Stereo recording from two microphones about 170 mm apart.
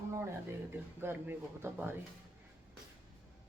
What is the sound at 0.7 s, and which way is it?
Speech, 10° right (ahead or behind).